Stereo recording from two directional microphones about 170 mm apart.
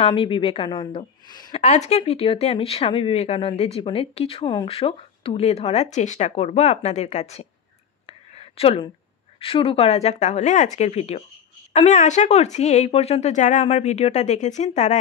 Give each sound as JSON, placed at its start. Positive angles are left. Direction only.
{"t": 0.0, "sound": "speech", "side_deg": 30}
{"t": 1.5, "sound": "speech", "side_deg": 40}
{"t": 8.1, "sound": "a sound", "side_deg": 35}
{"t": 9.4, "sound": "speech", "side_deg": 30}